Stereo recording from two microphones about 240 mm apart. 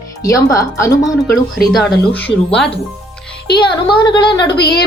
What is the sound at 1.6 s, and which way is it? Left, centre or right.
Speech, centre.